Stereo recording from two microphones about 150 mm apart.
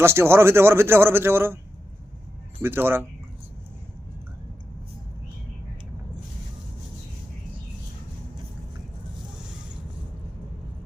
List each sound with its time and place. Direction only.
0.0 s speech: 15° right (ahead or behind)
2.6 s speech: 15° right (ahead or behind)